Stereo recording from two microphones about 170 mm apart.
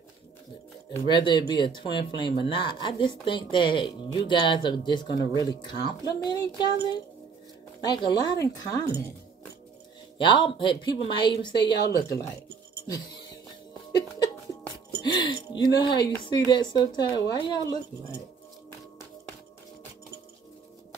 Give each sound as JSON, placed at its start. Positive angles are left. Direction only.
{"t": 1.0, "sound": "speech", "side_deg": 25}
{"t": 7.8, "sound": "speech", "side_deg": 25}
{"t": 10.1, "sound": "speech", "side_deg": 30}
{"t": 15.0, "sound": "a sound", "side_deg": 25}
{"t": 16.3, "sound": "speech", "side_deg": 25}